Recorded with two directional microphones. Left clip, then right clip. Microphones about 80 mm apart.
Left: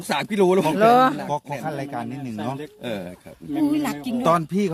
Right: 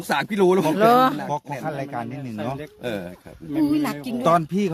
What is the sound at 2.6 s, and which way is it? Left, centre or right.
Speech, right.